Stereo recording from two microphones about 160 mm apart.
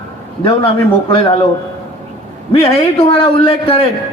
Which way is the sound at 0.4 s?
35° left (ahead or behind).